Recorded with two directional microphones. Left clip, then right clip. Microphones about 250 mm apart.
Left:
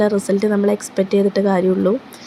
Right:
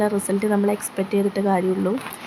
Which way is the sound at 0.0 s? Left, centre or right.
Centre.